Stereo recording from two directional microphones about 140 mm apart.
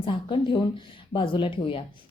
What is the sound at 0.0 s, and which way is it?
A woman's voice, 35° left (ahead or behind).